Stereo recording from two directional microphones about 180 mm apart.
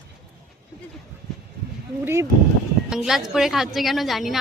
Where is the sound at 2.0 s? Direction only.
15° right (ahead or behind).